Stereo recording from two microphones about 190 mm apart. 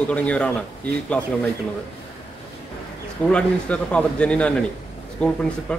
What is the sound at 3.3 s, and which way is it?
A man's voice, 5° left (ahead or behind).